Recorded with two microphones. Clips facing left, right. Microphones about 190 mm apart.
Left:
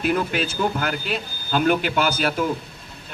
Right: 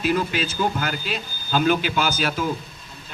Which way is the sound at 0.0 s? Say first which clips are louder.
Even; 55° left (ahead or behind).